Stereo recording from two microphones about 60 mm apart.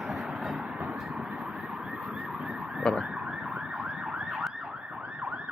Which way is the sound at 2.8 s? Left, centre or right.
Centre.